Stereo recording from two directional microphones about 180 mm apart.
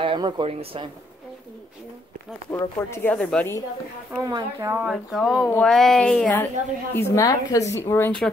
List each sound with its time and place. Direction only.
0.0 s a woman's voice: 30° right (ahead or behind)
2.5 s speech: 15° left (ahead or behind)
4.2 s speech: 25° right (ahead or behind)
4.6 s speech: 15° right (ahead or behind)
4.8 s a woman's voice: centre (ahead or behind)